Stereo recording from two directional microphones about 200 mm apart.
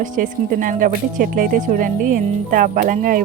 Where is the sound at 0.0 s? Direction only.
40° right (ahead or behind).